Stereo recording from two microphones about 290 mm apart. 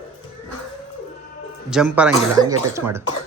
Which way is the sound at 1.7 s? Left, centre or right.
Centre.